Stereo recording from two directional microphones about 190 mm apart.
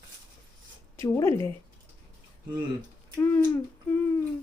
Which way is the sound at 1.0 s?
15° left (ahead or behind).